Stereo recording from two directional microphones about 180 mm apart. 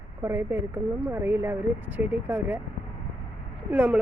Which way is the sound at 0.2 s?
15° right (ahead or behind).